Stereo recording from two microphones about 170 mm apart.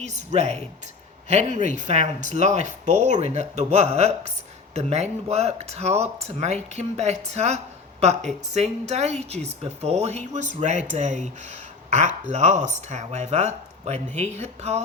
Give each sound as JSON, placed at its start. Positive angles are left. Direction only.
{"t": 0.0, "sound": "speech", "side_deg": -40}